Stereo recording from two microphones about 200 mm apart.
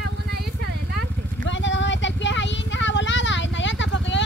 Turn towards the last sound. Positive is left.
turn(degrees=65)  # may be behind; listen again after turning